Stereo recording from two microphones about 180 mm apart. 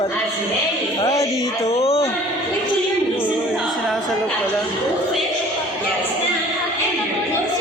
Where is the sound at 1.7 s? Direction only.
35° left (ahead or behind).